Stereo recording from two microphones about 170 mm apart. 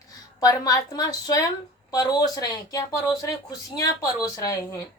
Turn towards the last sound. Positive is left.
turn(degrees=20)  # may be behind; listen again after turning